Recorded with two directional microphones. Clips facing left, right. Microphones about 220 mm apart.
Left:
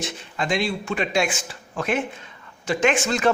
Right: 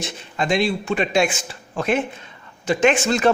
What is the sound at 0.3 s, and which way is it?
Speech, 25° right (ahead or behind).